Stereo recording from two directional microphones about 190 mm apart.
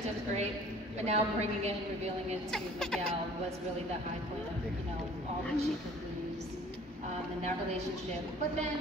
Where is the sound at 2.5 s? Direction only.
5° left (ahead or behind).